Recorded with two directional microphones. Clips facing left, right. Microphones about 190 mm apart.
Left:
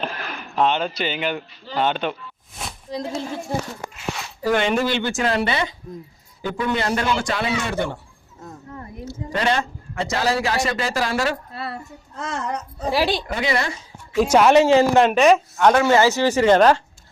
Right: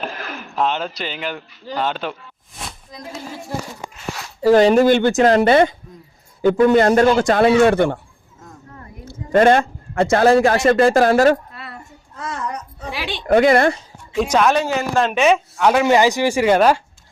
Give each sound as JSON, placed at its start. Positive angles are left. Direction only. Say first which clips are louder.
{"t": 0.5, "sound": "speech", "louder": "left 1 dB", "side_deg": 0}
{"t": 2.9, "sound": "a woman's voice", "louder": "left 10 dB", "side_deg": 30}
{"t": 4.4, "sound": "a man's voice", "louder": "right 9 dB", "side_deg": -35}
{"t": 9.0, "sound": "a man's voice", "louder": "right 9 dB", "side_deg": -50}
{"t": 11.5, "sound": "a sound", "louder": "left 5 dB", "side_deg": 30}
{"t": 12.9, "sound": "a woman's voice", "louder": "left 7 dB", "side_deg": 40}
{"t": 13.2, "sound": "a man's voice", "louder": "right 10 dB", "side_deg": -50}
{"t": 14.2, "sound": "a woman's voice", "louder": "left 1 dB", "side_deg": 10}
{"t": 14.6, "sound": "speech", "louder": "left 5 dB", "side_deg": 25}
{"t": 15.1, "sound": "speech", "louder": "left 1 dB", "side_deg": 0}
{"t": 15.7, "sound": "speech", "louder": "right 3 dB", "side_deg": -15}